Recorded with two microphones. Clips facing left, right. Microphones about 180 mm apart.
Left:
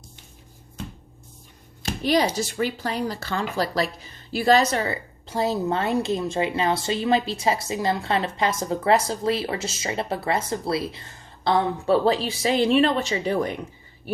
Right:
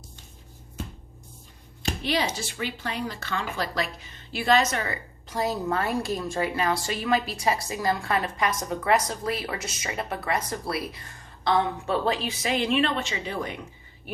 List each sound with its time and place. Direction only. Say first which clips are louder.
2.0 s speech: left 7 dB; 40° left (ahead or behind)